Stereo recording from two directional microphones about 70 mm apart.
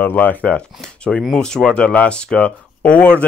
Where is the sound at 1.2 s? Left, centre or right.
Centre.